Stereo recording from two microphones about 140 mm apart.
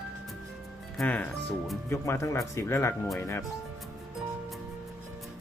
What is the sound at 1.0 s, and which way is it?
Speech, 15° left (ahead or behind).